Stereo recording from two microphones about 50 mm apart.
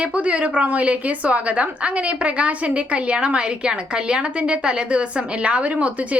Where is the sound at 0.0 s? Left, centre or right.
Right.